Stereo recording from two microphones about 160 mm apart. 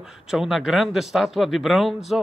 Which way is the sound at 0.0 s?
Centre (ahead or behind).